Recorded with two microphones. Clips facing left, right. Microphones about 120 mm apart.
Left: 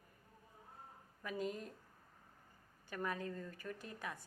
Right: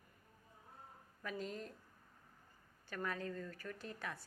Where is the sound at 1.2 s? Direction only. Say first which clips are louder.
Left 2 dB; 15° left (ahead or behind).